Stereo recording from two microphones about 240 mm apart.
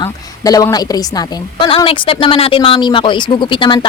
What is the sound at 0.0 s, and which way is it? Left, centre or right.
Speech, centre.